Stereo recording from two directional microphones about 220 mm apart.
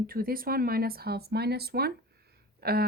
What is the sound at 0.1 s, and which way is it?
Speech, 40° right (ahead or behind).